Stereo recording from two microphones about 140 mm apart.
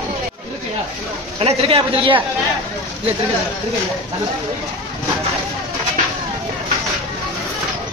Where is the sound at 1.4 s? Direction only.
45° right (ahead or behind).